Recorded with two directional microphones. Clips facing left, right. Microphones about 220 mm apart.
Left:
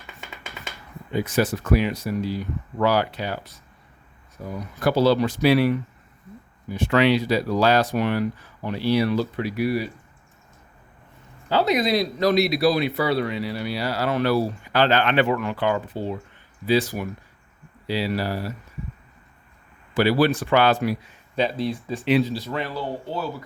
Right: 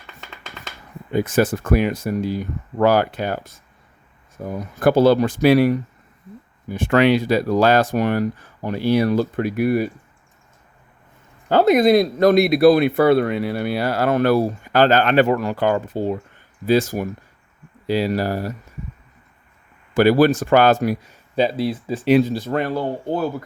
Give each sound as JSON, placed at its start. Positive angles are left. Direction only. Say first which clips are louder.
{"t": 1.1, "sound": "speech", "louder": "right 4 dB", "side_deg": -50}
{"t": 11.4, "sound": "speech", "louder": "right 7 dB", "side_deg": -50}
{"t": 19.9, "sound": "speech", "louder": "right 5 dB", "side_deg": -50}
{"t": 21.6, "sound": "speech", "louder": "right 4 dB", "side_deg": -5}
{"t": 22.0, "sound": "speech", "louder": "right 5 dB", "side_deg": -45}